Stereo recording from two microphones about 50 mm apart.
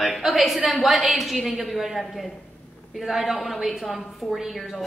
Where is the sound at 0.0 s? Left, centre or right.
Centre.